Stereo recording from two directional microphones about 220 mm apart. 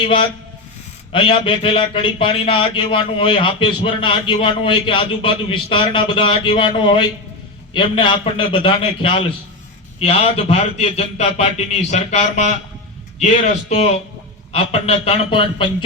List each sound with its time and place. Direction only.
0.0 s speech: 20° left (ahead or behind)